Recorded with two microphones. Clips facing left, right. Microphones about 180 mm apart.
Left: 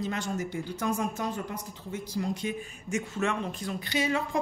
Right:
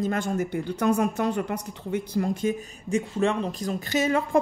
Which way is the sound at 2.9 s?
30° right (ahead or behind).